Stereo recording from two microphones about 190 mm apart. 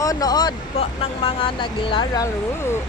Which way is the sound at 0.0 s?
20° left (ahead or behind).